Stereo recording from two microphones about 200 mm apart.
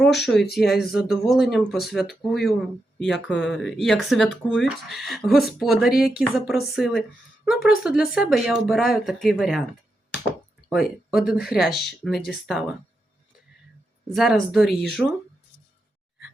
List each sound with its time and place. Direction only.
0.0 s speech: centre (ahead or behind)
10.7 s speech: centre (ahead or behind)
14.1 s speech: centre (ahead or behind)